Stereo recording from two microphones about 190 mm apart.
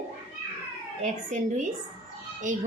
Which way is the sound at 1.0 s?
40° right (ahead or behind).